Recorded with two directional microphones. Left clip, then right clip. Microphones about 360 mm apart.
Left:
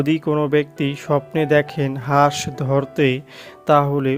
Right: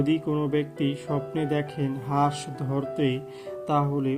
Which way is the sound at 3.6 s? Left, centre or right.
Left.